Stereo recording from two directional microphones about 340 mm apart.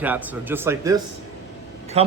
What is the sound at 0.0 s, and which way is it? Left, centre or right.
Speech, centre.